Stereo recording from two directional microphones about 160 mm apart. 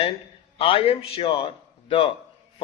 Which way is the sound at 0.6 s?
35° left (ahead or behind).